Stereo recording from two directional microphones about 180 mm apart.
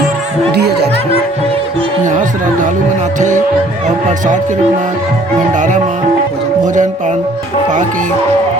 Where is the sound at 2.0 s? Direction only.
45° right (ahead or behind).